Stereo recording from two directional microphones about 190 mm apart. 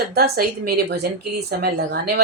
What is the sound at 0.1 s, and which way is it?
A woman's voice, 50° right (ahead or behind).